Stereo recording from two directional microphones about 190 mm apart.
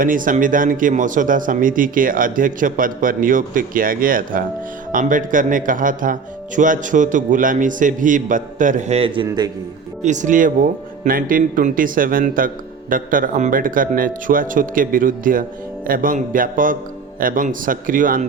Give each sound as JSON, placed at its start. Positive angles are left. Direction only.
{"t": 0.0, "sound": "speech", "side_deg": -45}
{"t": 10.0, "sound": "speech", "side_deg": -40}